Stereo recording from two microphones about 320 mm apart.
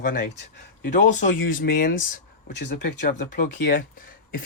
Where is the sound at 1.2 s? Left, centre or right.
Left.